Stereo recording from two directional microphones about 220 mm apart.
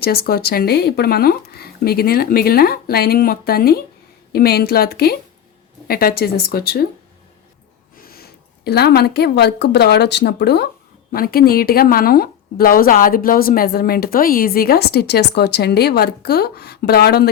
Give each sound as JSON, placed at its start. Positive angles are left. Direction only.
{"t": 0.0, "sound": "a woman's voice", "side_deg": 45}
{"t": 7.9, "sound": "a woman's voice", "side_deg": 45}